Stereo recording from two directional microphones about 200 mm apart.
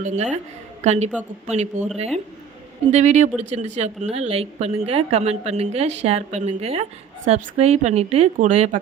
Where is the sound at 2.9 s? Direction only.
35° right (ahead or behind).